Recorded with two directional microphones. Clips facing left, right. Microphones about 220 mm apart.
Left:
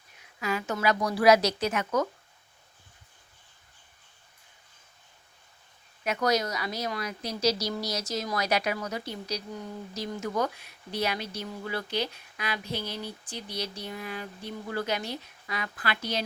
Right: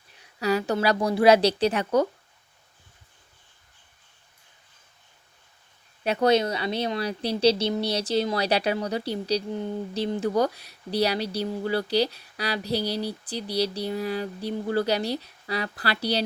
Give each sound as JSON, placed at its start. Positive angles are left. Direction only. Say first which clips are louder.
{"t": 0.2, "sound": "a woman's voice", "louder": "right 7 dB", "side_deg": -35}
{"t": 6.0, "sound": "a woman's voice", "louder": "right 6 dB", "side_deg": -30}